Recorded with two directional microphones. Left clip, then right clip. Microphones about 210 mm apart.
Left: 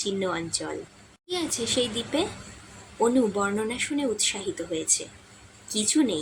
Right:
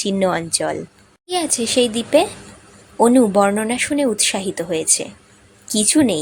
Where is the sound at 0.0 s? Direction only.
45° right (ahead or behind).